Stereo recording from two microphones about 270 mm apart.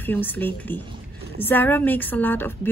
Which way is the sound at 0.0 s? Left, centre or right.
Centre.